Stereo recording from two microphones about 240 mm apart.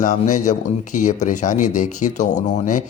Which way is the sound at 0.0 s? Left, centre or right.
Left.